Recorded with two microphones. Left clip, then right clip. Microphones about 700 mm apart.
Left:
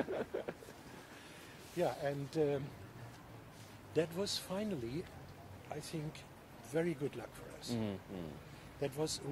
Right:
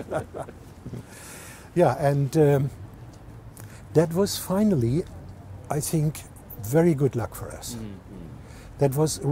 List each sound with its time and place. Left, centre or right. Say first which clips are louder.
1.8 s speech: right 16 dB; right
3.9 s speech: right 14 dB; right
8.7 s speech: right 15 dB; right